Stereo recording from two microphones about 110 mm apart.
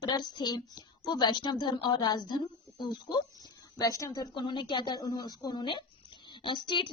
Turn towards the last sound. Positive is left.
turn(degrees=45)  # may be behind; listen again after turning